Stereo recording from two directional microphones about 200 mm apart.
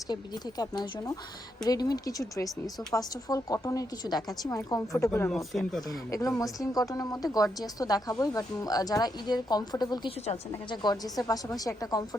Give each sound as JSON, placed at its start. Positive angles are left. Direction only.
{"t": 0.6, "sound": "a woman's voice", "side_deg": 20}
{"t": 5.5, "sound": "speech", "side_deg": 5}
{"t": 6.1, "sound": "a woman's voice", "side_deg": 15}